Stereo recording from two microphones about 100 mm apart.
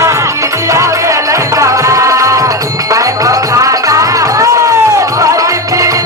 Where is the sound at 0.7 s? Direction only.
30° right (ahead or behind).